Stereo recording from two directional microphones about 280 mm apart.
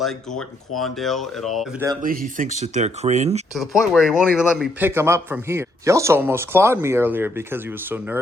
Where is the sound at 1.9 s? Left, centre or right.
Right.